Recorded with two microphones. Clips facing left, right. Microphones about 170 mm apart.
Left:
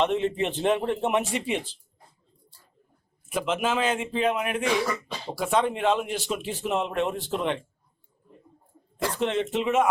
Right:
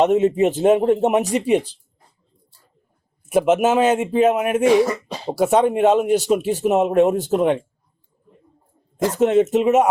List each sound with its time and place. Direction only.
0.0 s speech: 45° right (ahead or behind)
3.3 s speech: 45° right (ahead or behind)
9.0 s speech: 45° right (ahead or behind)